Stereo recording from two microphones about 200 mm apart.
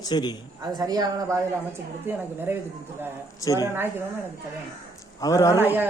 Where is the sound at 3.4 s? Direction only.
15° left (ahead or behind).